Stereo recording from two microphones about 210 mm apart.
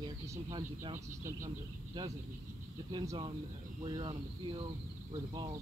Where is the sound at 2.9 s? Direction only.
20° right (ahead or behind).